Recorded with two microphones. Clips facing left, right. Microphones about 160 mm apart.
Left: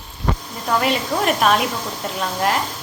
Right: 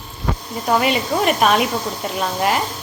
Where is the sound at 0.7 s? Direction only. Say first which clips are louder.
Right 1 dB; 5° right (ahead or behind).